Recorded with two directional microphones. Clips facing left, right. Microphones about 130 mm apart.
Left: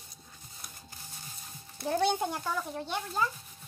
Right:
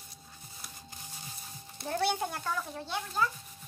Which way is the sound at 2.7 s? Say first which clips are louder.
Left 2 dB; 15° left (ahead or behind).